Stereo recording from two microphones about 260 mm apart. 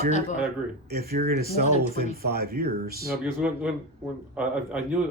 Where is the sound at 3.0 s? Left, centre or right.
Centre.